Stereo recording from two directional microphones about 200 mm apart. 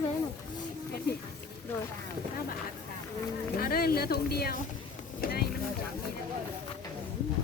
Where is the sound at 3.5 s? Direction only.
45° left (ahead or behind).